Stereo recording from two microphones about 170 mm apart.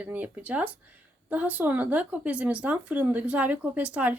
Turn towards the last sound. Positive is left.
turn(degrees=-10)  # may be behind; listen again after turning